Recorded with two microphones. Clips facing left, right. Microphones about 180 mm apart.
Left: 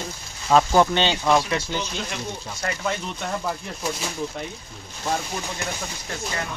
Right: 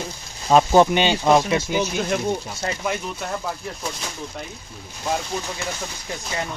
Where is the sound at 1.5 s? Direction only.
10° right (ahead or behind).